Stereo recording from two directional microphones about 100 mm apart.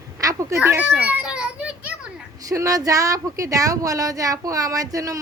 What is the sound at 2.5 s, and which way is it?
Speech, 35° right (ahead or behind).